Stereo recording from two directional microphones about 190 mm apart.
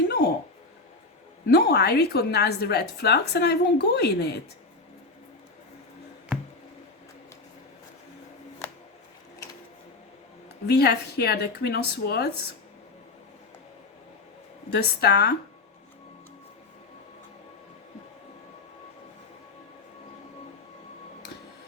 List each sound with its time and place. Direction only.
0.1 s a sound: 55° left (ahead or behind)
1.5 s a woman's voice: 60° left (ahead or behind)
10.7 s a woman's voice: 60° left (ahead or behind)
14.7 s a woman's voice: 55° left (ahead or behind)